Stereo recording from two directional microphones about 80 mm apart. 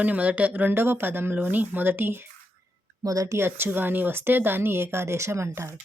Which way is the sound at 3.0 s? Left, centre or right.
Right.